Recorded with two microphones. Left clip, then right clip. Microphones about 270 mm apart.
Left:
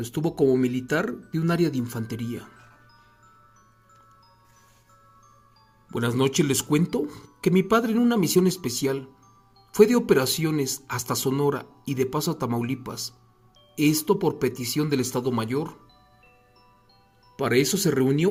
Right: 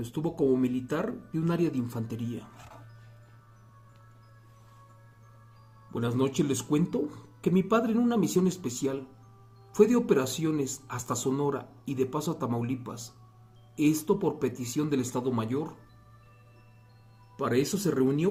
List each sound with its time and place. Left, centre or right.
0.0 s speech: left
5.9 s speech: left
14.0 s speech: left
17.4 s speech: left